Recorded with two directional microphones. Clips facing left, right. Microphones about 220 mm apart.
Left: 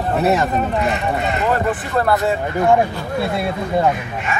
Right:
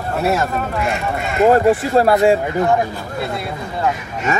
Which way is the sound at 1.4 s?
40° right (ahead or behind).